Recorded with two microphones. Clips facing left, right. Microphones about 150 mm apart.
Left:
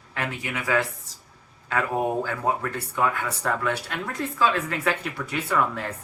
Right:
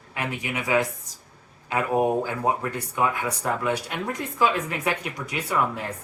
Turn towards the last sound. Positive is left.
turn(degrees=-10)  # may be behind; listen again after turning